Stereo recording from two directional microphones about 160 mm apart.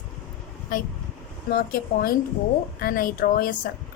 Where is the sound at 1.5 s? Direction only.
70° left (ahead or behind).